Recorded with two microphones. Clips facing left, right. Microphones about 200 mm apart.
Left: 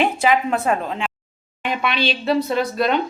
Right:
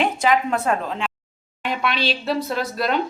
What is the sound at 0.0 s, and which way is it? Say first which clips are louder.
A woman's voice: left 1 dB; 5° left (ahead or behind).